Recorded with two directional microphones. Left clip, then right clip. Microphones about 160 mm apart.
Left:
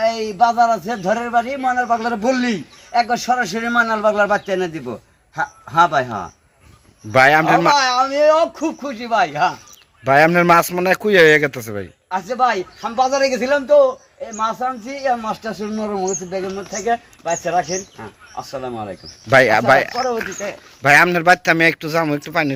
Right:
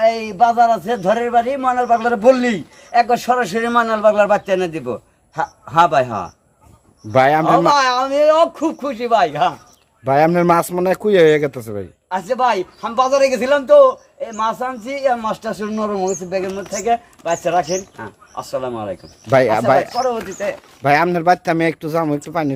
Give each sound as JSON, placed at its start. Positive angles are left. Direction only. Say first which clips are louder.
{"t": 0.0, "sound": "a man's voice", "louder": "right 2 dB", "side_deg": -25}
{"t": 7.1, "sound": "a man's voice", "louder": "left 1 dB", "side_deg": -15}
{"t": 7.8, "sound": "a man's voice", "louder": "right 1 dB", "side_deg": -35}
{"t": 10.0, "sound": "a man's voice", "louder": "left 1 dB", "side_deg": -10}
{"t": 12.0, "sound": "a man's voice", "louder": "right 1 dB", "side_deg": -30}
{"t": 16.8, "sound": "a man's voice", "louder": "right 2 dB", "side_deg": -35}
{"t": 19.3, "sound": "a man's voice", "louder": "left 1 dB", "side_deg": -10}